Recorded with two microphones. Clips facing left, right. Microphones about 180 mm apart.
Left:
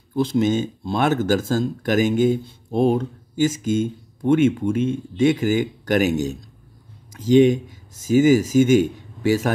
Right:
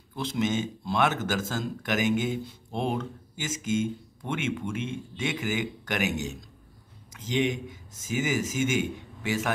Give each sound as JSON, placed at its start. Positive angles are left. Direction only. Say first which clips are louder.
{"t": 0.1, "sound": "speech", "louder": "left 9 dB", "side_deg": 30}